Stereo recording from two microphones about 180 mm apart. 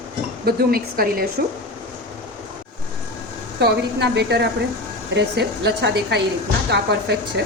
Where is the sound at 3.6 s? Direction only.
65° right (ahead or behind).